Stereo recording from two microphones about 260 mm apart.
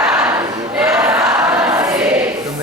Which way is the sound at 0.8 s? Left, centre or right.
Centre.